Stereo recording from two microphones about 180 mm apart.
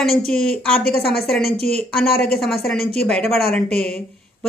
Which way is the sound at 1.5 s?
35° right (ahead or behind).